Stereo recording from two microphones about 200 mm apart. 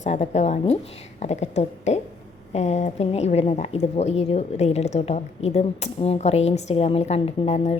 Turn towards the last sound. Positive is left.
turn(degrees=35)  # may be behind; listen again after turning